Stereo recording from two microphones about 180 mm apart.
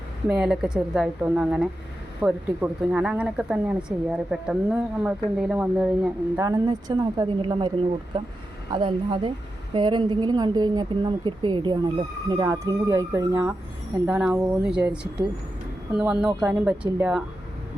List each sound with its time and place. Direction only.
0.3 s speech: 5° right (ahead or behind)
6.4 s speech: 20° right (ahead or behind)
8.7 s speech: 25° right (ahead or behind); by 14.8 s 5° right (ahead or behind)
15.9 s speech: 5° right (ahead or behind)